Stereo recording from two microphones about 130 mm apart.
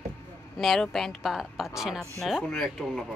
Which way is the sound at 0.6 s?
Centre (ahead or behind).